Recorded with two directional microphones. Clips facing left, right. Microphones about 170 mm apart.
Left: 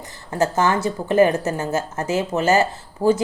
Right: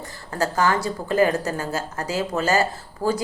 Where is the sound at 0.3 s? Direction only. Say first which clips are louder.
Left 2 dB; 20° left (ahead or behind).